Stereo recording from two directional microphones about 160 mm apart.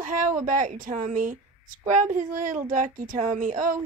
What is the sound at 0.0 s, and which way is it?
A woman's voice, 55° right (ahead or behind).